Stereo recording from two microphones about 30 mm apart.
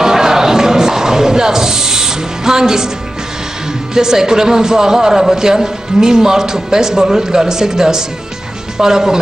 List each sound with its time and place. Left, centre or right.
0.0 s music: centre
3.9 s a man's voice: centre